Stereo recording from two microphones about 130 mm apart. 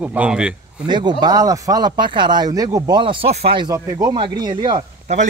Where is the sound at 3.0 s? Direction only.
40° right (ahead or behind).